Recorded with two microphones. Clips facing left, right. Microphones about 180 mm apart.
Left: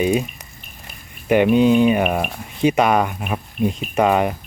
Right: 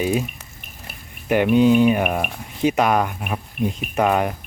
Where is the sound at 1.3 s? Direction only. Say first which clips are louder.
Left 1 dB; 5° left (ahead or behind).